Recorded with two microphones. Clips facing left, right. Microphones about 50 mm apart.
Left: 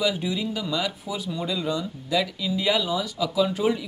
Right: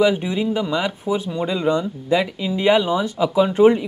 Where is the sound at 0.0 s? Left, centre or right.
Right.